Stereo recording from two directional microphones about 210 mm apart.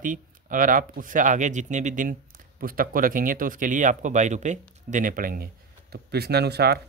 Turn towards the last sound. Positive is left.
turn(degrees=-50)  # may be behind; listen again after turning